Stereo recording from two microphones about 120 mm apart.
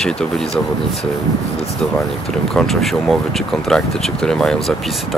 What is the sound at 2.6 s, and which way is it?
Speech, centre (ahead or behind).